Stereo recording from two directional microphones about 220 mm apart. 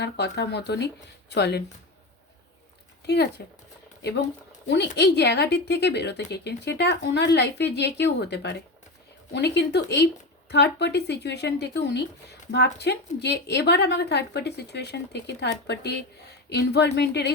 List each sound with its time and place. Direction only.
0.0 s speech: 50° left (ahead or behind)
3.1 s speech: 50° left (ahead or behind)
4.9 s speech: 50° left (ahead or behind)